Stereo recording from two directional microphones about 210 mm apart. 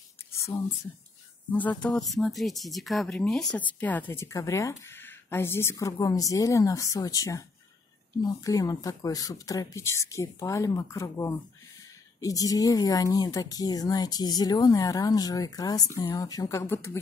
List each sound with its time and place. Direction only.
1.5 s speech: 5° left (ahead or behind)